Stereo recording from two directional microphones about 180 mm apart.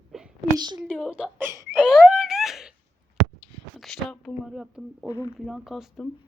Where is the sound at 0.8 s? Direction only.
5° left (ahead or behind).